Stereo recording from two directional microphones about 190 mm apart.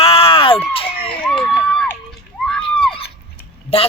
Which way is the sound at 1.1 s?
5° left (ahead or behind).